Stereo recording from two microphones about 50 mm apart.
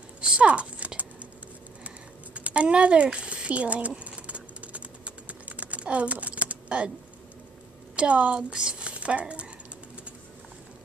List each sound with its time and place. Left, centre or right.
0.2 s typing: right
2.3 s a sound: right
7.9 s a woman's voice: right